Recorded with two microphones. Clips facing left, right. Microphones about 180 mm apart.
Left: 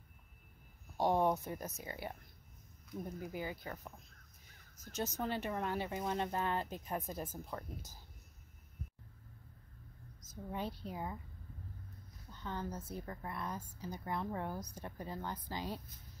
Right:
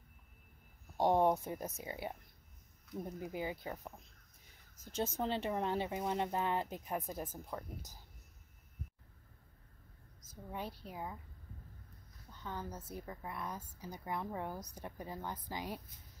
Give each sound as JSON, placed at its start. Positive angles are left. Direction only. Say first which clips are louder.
{"t": 0.9, "sound": "speech", "louder": "right 2 dB", "side_deg": -20}
{"t": 3.3, "sound": "speech", "louder": "right 4 dB", "side_deg": -20}
{"t": 4.9, "sound": "a woman's voice", "louder": "right 2 dB", "side_deg": -30}
{"t": 10.5, "sound": "speech", "louder": "left 2 dB", "side_deg": -5}
{"t": 12.4, "sound": "a woman's voice", "louder": "left 2 dB", "side_deg": -10}